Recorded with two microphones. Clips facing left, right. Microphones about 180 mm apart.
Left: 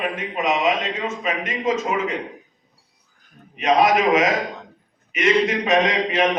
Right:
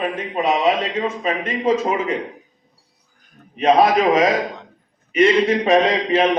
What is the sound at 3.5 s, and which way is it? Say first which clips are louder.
A man's voice: right 3 dB; 30° right (ahead or behind).